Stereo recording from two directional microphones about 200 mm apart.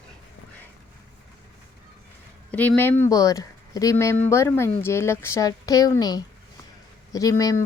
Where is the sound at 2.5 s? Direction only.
10° left (ahead or behind).